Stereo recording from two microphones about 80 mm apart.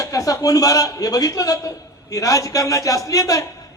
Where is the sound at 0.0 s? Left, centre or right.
Left.